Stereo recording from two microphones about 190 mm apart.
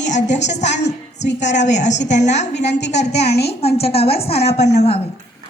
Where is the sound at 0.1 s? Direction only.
40° left (ahead or behind).